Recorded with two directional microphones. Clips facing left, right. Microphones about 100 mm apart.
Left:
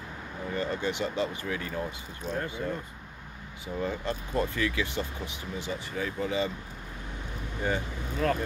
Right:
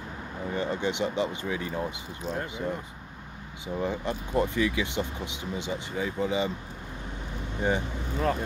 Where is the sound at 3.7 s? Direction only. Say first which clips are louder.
Right 2 dB; 15° right (ahead or behind).